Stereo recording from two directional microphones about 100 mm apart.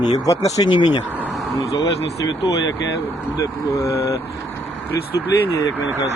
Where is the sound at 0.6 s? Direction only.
50° left (ahead or behind).